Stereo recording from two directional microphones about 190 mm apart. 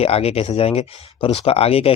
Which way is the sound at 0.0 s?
30° left (ahead or behind).